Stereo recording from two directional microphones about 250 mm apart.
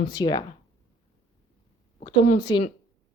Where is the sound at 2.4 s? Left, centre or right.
Centre.